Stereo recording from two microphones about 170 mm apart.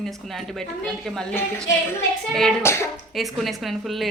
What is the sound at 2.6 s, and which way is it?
Speech, 15° left (ahead or behind).